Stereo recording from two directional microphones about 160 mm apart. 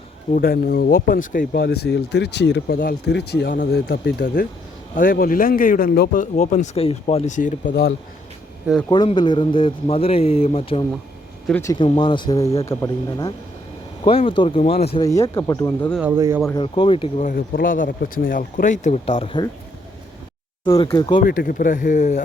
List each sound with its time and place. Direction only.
0.3 s speech: 70° left (ahead or behind)
1.6 s speech: 90° left
4.9 s speech: 60° left (ahead or behind); by 6.1 s 75° left (ahead or behind)
6.1 s speech: 45° left (ahead or behind)
7.3 s speech: 55° left (ahead or behind)
7.7 s speech: 90° left
8.9 s a man's voice: 30° left (ahead or behind)
14.0 s a man's voice: 35° left (ahead or behind)
15.0 s speech: 20° left (ahead or behind)
16.0 s speech: 15° right (ahead or behind)
16.6 s a man's voice: 35° left (ahead or behind)
17.2 s speech: 65° left (ahead or behind); by 19.5 s 35° left (ahead or behind)
20.8 s a man's voice: 30° left (ahead or behind)
21.2 s speech: 60° left (ahead or behind)